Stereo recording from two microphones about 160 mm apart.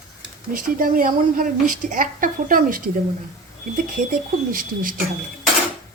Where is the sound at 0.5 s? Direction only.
60° right (ahead or behind).